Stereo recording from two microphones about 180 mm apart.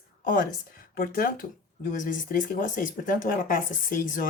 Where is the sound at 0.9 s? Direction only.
55° left (ahead or behind).